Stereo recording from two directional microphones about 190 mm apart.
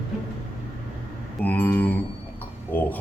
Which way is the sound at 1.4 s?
10° left (ahead or behind).